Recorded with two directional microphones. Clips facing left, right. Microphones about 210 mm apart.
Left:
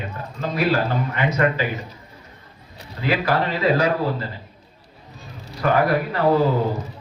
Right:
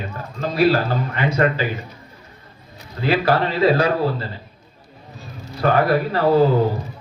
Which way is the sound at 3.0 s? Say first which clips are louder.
Right 3 dB; 30° right (ahead or behind).